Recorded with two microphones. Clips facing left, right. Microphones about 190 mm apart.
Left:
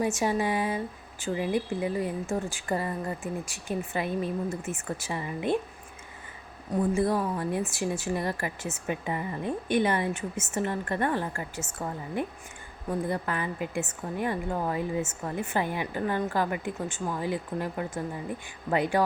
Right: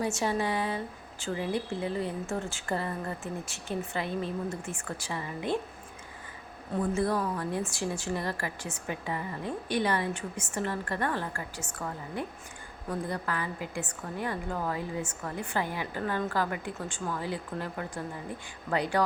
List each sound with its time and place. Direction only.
0.0 s speech: 15° left (ahead or behind)
6.9 s a woman's voice: 20° left (ahead or behind)